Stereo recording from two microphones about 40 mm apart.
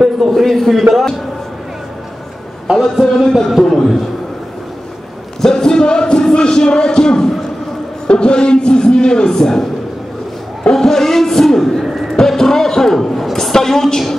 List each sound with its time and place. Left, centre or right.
0.3 s a man's voice: centre
2.7 s a man's voice: centre
5.4 s music: centre
10.7 s a sound: centre